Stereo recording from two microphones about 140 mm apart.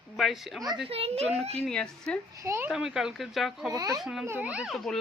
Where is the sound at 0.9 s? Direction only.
45° right (ahead or behind).